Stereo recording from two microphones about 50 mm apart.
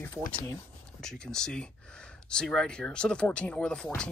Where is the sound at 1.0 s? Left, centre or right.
Centre.